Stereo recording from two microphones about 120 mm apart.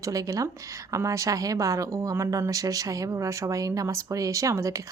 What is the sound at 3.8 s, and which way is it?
Speech, 25° right (ahead or behind).